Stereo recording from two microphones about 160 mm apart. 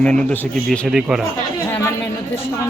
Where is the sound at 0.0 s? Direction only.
5° left (ahead or behind).